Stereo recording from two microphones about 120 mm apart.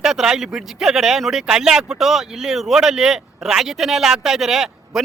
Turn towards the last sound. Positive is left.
turn(degrees=-5)  # may be behind; listen again after turning